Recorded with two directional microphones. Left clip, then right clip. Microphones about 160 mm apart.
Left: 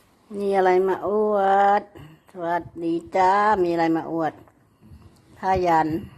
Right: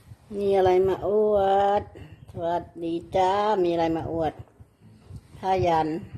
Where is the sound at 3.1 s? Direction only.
20° left (ahead or behind).